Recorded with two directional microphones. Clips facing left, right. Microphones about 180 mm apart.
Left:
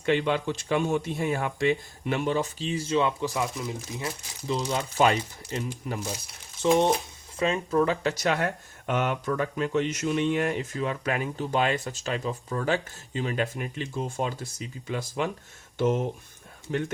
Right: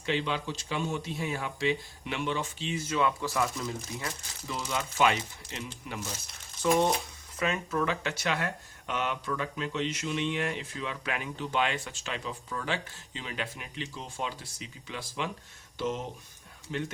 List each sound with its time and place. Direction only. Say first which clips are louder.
0.0 s speech: left 6 dB; 55° left (ahead or behind)
6.6 s speech: left 4 dB; 25° left (ahead or behind); by 16.8 s 50° left (ahead or behind)